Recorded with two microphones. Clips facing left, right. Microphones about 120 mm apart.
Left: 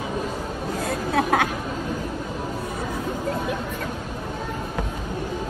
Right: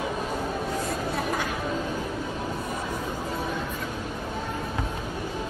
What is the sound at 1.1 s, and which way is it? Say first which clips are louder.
Chatter: left 7 dB; 65° left (ahead or behind).